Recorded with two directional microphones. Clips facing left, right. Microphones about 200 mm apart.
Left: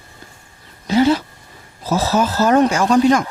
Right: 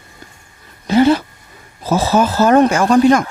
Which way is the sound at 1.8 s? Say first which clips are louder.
Right 3 dB; 55° right (ahead or behind).